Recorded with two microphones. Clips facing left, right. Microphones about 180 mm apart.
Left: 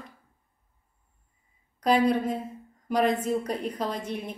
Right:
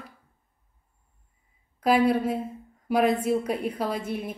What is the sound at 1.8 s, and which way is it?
Speech, 5° right (ahead or behind).